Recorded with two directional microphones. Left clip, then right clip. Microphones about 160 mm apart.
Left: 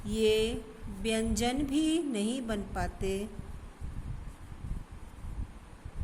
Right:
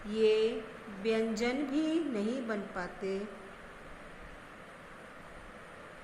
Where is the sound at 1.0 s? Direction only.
55° left (ahead or behind).